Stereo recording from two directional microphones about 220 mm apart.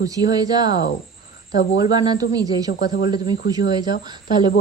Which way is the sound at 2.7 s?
45° left (ahead or behind).